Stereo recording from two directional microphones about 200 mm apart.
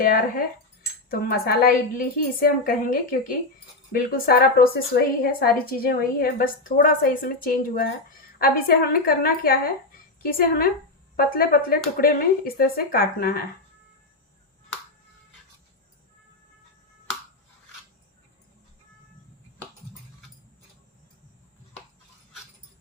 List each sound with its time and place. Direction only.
0.0 s speech: 45° left (ahead or behind)